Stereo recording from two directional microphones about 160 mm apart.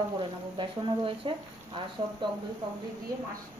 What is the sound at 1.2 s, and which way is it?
Speech, 30° right (ahead or behind).